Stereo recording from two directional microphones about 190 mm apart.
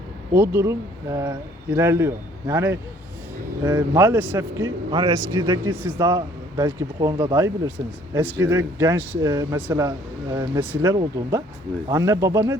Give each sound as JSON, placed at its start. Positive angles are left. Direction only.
{"t": 0.3, "sound": "speech", "side_deg": -10}